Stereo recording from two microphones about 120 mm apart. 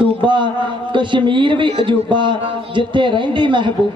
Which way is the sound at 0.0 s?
40° right (ahead or behind).